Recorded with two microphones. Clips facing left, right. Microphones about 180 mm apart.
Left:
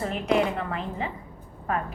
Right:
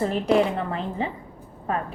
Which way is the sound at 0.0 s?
30° right (ahead or behind).